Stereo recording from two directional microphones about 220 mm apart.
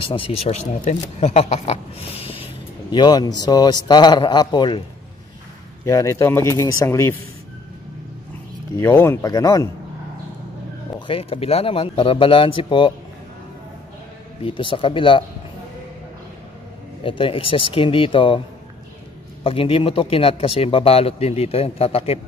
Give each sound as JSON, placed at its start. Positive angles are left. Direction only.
{"t": 0.0, "sound": "speech", "side_deg": 25}
{"t": 5.9, "sound": "speech", "side_deg": 15}
{"t": 8.7, "sound": "speech", "side_deg": 10}
{"t": 11.1, "sound": "speech", "side_deg": 25}
{"t": 14.4, "sound": "speech", "side_deg": 25}
{"t": 17.0, "sound": "speech", "side_deg": 25}
{"t": 19.4, "sound": "speech", "side_deg": 25}